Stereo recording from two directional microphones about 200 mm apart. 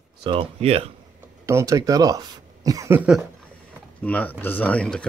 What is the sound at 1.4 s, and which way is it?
Speech, 15° right (ahead or behind).